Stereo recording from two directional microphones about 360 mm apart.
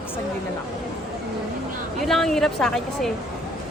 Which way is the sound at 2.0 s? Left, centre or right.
Centre.